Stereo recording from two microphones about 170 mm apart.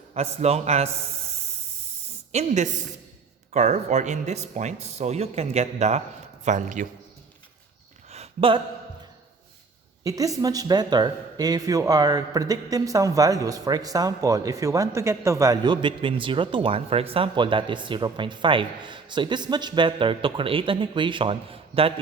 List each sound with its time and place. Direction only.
0.1 s speech: 40° right (ahead or behind)
2.3 s a man's voice: 40° right (ahead or behind)
8.1 s a sound: 35° right (ahead or behind)
10.0 s speech: 20° right (ahead or behind)